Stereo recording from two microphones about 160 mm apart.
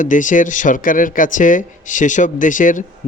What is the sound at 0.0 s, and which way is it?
Speech, 55° left (ahead or behind).